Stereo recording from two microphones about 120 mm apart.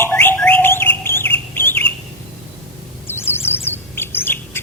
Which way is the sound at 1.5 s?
20° left (ahead or behind).